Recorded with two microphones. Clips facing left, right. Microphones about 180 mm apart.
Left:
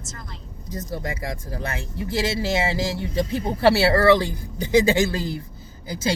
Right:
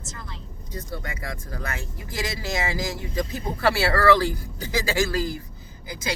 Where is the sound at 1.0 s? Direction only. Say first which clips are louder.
Left 5 dB; 30° left (ahead or behind).